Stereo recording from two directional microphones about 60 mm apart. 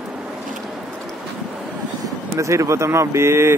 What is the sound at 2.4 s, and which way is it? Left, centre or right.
Speech, right.